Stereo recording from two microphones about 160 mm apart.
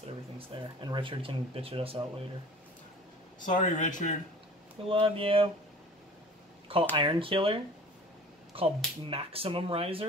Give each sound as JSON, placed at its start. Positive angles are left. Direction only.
{"t": 0.4, "sound": "speech", "side_deg": -25}
{"t": 3.4, "sound": "speech", "side_deg": 50}
{"t": 4.8, "sound": "speech", "side_deg": -35}
{"t": 7.0, "sound": "speech", "side_deg": -35}